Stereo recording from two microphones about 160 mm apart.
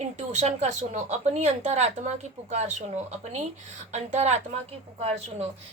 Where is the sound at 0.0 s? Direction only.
50° right (ahead or behind).